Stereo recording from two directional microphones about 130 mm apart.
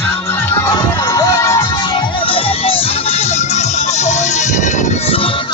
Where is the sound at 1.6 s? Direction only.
35° left (ahead or behind).